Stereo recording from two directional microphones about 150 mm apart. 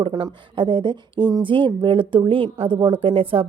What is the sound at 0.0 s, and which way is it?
A woman's voice, 30° right (ahead or behind).